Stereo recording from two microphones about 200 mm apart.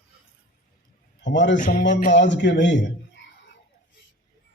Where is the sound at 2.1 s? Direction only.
65° left (ahead or behind).